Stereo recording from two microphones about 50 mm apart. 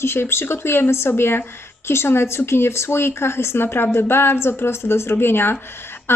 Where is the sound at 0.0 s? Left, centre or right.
Left.